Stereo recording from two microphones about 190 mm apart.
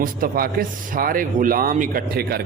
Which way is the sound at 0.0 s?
50° right (ahead or behind).